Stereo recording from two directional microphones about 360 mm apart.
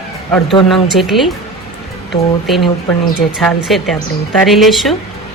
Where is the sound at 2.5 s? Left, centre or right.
Centre.